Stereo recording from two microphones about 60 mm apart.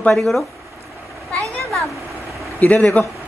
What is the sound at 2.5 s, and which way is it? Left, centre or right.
Speech, left.